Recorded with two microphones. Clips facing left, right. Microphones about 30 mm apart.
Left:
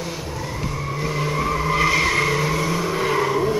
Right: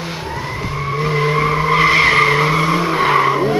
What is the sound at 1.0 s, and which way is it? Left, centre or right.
Vehicle, right.